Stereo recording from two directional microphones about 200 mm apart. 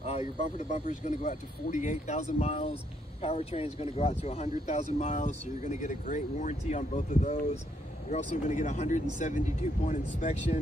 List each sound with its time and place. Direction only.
0.7 s speech: 35° left (ahead or behind)